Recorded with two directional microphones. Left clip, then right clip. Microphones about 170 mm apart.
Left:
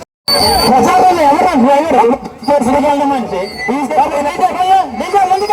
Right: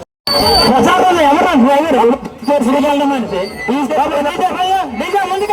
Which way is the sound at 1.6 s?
Centre (ahead or behind).